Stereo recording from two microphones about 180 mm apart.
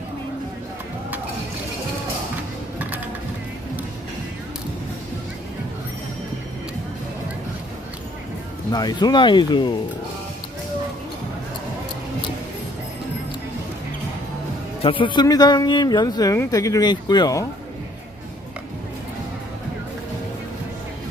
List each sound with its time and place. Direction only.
8.7 s speech: 20° left (ahead or behind)
14.8 s speech: 30° left (ahead or behind)